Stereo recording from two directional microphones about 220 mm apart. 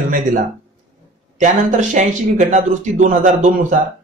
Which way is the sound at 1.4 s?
35° right (ahead or behind).